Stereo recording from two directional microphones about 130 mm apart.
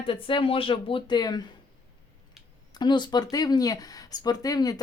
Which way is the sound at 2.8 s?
35° left (ahead or behind).